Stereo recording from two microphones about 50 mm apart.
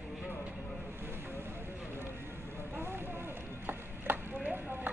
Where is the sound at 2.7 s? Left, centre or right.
Right.